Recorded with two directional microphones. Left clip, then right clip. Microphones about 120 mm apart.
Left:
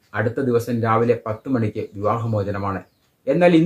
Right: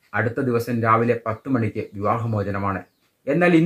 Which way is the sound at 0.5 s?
15° left (ahead or behind).